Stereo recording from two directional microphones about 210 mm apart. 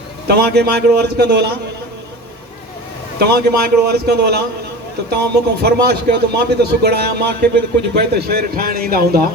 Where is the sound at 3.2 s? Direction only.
50° right (ahead or behind).